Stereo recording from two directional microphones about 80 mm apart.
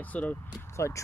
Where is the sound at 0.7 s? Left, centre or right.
Left.